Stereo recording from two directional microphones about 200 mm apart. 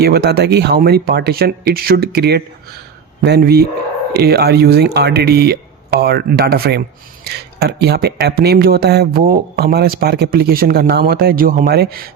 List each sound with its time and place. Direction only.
0.0 s speech: 55° right (ahead or behind)